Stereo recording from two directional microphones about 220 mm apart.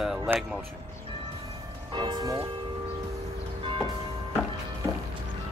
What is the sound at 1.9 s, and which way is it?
Speech, 20° right (ahead or behind).